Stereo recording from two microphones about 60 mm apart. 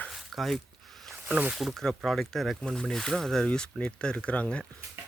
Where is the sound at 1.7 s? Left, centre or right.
Centre.